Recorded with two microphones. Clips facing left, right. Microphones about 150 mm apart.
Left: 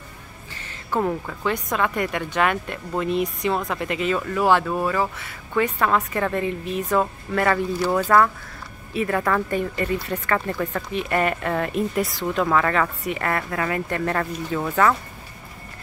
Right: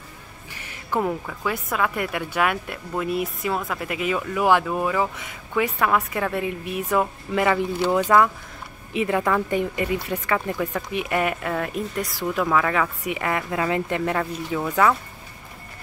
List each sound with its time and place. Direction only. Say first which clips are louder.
0.5 s music: even; 10° right (ahead or behind)
1.2 s speech: left 2 dB; 5° right (ahead or behind)